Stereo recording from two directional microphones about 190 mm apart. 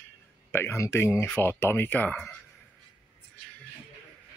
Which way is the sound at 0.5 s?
15° left (ahead or behind).